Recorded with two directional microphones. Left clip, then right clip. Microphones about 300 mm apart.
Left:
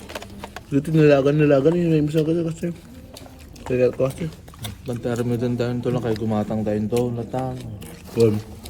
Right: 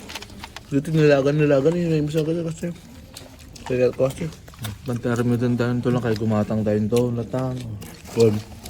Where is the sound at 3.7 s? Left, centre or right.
Centre.